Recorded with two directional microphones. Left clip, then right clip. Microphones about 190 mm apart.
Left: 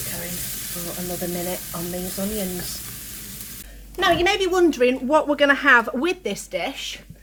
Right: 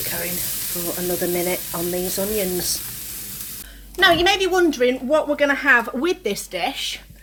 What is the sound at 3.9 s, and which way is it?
A woman's voice, centre (ahead or behind).